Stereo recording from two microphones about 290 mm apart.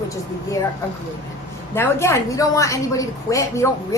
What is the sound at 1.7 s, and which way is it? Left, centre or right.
A woman's voice, centre.